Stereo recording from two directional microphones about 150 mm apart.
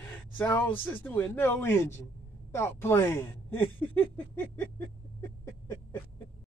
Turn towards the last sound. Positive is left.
turn(degrees=20)  # may be behind; listen again after turning